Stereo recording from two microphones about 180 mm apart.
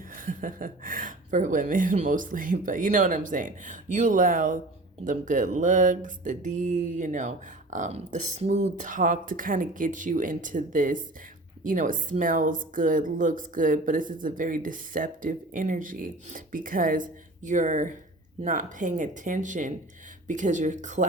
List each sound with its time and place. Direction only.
0.2 s speech: 50° right (ahead or behind)